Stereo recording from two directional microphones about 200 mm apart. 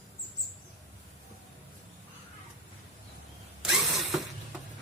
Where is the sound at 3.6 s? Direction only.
Centre (ahead or behind).